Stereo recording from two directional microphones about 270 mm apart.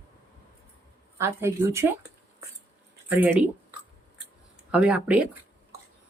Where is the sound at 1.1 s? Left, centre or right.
Centre.